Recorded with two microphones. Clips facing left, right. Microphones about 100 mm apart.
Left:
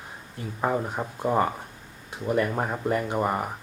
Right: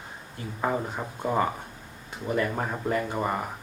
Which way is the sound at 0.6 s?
5° left (ahead or behind).